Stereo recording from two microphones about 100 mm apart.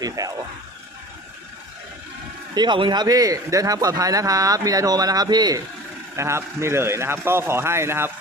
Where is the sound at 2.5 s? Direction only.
50° right (ahead or behind).